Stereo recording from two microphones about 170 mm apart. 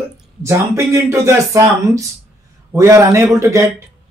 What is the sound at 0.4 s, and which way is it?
Speech, 15° right (ahead or behind).